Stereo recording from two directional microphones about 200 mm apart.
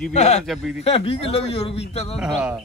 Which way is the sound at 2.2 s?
5° right (ahead or behind).